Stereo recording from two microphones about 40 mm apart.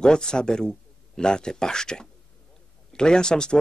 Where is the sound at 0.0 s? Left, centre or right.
Centre.